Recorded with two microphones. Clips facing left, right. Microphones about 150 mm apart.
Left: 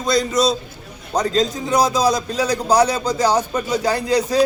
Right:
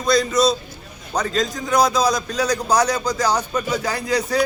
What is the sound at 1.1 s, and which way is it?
A man's voice, 35° left (ahead or behind).